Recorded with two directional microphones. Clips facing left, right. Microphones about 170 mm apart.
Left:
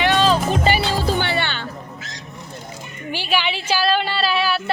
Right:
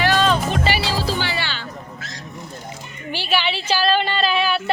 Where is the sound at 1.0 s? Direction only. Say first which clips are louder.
Left 3 dB; 55° left (ahead or behind).